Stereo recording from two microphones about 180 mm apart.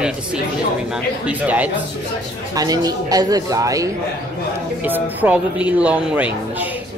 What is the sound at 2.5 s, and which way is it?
A man's voice, 20° right (ahead or behind).